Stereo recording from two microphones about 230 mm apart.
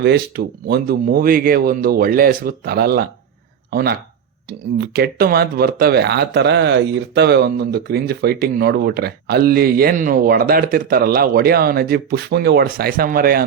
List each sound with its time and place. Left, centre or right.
0.0 s a man's voice: right